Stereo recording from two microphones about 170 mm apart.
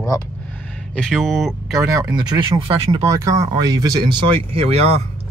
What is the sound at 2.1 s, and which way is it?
Speech, 25° right (ahead or behind).